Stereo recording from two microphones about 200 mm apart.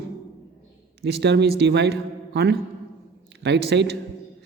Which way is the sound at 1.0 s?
55° right (ahead or behind).